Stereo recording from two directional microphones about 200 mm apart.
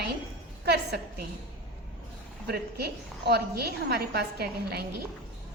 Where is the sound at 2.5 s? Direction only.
50° right (ahead or behind).